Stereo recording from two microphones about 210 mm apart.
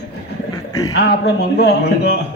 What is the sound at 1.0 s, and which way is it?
A man's voice, 55° left (ahead or behind).